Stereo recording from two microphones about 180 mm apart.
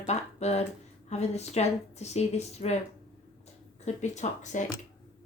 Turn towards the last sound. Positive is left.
turn(degrees=40)  # may be behind; listen again after turning